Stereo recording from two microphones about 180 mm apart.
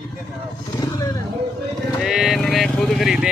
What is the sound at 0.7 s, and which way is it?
Wild animals, 20° left (ahead or behind).